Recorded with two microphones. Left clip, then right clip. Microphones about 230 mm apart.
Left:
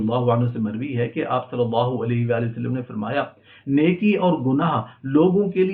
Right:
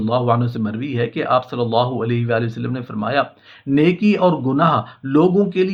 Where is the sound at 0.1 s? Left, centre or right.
Right.